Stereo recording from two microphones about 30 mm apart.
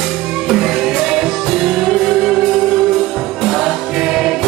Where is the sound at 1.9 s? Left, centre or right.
Centre.